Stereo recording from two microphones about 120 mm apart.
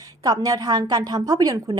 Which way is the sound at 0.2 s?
30° right (ahead or behind).